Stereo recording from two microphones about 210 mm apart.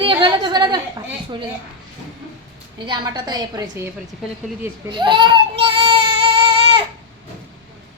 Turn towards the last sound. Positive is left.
turn(degrees=-25)  # may be behind; listen again after turning